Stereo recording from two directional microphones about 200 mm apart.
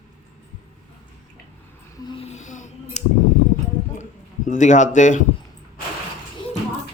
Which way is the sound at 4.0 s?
40° left (ahead or behind).